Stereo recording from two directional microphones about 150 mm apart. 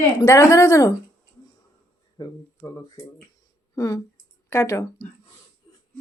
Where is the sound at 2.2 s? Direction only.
25° left (ahead or behind).